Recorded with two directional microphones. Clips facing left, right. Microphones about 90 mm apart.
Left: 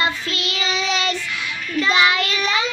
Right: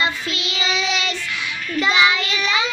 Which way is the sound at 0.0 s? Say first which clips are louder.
Even; 50° left (ahead or behind).